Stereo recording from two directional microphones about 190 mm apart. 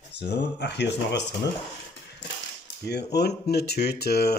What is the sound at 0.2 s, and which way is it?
Speech, 65° left (ahead or behind).